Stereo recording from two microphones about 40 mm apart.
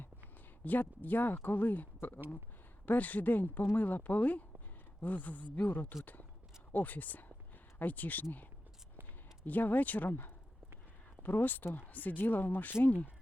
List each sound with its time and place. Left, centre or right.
0.6 s speech: left
11.2 s speech: left
12.8 s speech: left